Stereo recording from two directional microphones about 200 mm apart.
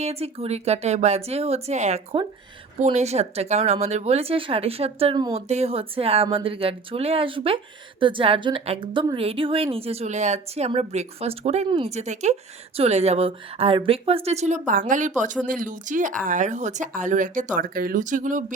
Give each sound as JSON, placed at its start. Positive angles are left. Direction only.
{"t": 0.0, "sound": "speech", "side_deg": -30}